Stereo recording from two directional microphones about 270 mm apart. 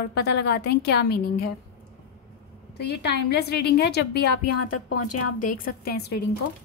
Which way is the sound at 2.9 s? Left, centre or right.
Left.